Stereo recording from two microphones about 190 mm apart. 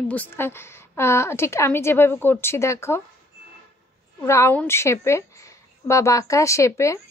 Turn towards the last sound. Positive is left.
turn(degrees=15)  # may be behind; listen again after turning